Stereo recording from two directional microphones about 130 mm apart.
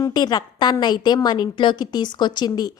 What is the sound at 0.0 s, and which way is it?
A woman's voice, 30° left (ahead or behind).